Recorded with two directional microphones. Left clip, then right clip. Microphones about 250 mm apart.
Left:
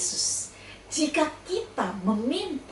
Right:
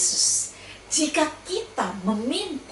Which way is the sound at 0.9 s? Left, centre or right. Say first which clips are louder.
Right 2 dB; centre.